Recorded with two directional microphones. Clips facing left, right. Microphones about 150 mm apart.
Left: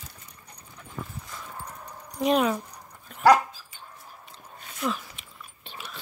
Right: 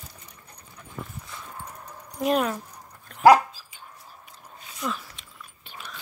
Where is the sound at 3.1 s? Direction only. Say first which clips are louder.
Right 1 dB; 5° left (ahead or behind).